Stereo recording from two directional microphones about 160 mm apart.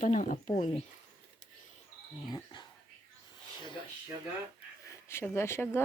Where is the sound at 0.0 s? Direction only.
55° left (ahead or behind).